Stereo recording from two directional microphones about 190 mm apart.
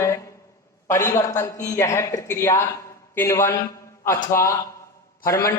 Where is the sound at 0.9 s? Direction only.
15° left (ahead or behind).